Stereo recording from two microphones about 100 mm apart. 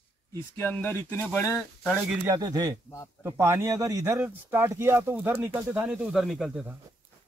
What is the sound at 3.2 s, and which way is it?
Speech, 25° right (ahead or behind).